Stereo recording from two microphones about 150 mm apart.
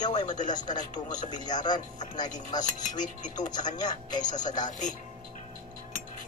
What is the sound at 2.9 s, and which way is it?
Speech, 55° left (ahead or behind).